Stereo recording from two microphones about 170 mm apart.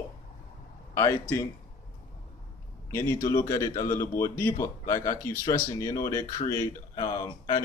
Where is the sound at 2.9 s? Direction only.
15° left (ahead or behind).